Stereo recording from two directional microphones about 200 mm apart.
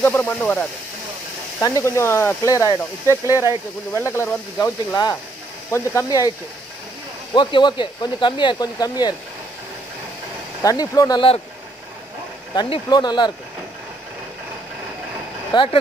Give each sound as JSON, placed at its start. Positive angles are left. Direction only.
{"t": 0.0, "sound": "speech", "side_deg": 10}
{"t": 7.3, "sound": "speech", "side_deg": 25}
{"t": 10.6, "sound": "speech", "side_deg": 15}
{"t": 12.5, "sound": "speech", "side_deg": 25}
{"t": 15.5, "sound": "speech", "side_deg": 25}